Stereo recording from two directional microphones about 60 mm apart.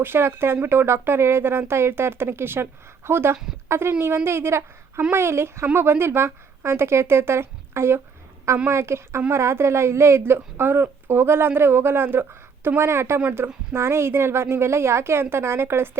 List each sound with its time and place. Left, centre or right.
0.0 s a woman's voice: right